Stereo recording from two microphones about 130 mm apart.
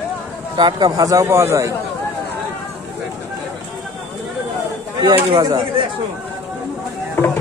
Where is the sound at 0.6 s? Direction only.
35° right (ahead or behind).